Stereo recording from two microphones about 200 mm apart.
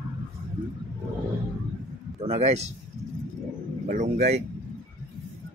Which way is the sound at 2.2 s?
35° right (ahead or behind).